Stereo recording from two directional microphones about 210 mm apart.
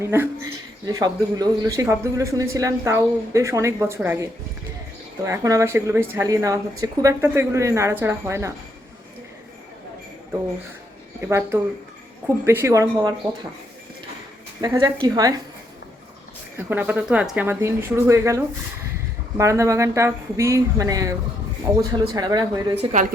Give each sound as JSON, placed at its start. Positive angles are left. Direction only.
{"t": 0.0, "sound": "speech", "side_deg": -10}
{"t": 11.2, "sound": "speech", "side_deg": -10}
{"t": 14.6, "sound": "speech", "side_deg": -15}
{"t": 16.6, "sound": "speech", "side_deg": -10}
{"t": 22.8, "sound": "a woman's voice", "side_deg": -35}